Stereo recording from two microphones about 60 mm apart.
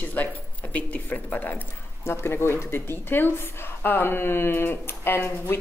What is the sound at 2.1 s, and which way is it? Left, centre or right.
Speech, left.